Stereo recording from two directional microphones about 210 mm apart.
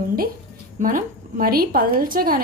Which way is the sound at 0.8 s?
40° right (ahead or behind).